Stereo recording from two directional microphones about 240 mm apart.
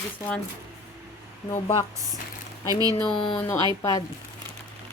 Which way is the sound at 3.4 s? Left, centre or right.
Centre.